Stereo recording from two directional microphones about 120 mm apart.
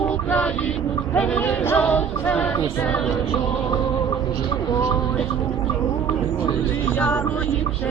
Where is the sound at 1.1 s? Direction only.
10° left (ahead or behind).